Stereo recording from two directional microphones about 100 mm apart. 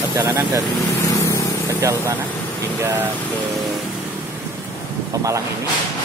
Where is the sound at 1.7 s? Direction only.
30° right (ahead or behind).